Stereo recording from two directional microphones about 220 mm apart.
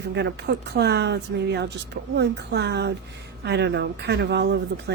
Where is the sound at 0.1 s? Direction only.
50° right (ahead or behind).